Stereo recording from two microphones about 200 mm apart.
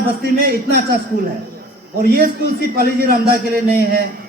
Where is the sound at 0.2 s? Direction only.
50° right (ahead or behind).